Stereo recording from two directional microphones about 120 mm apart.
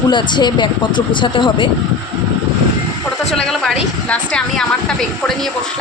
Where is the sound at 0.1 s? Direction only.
40° left (ahead or behind).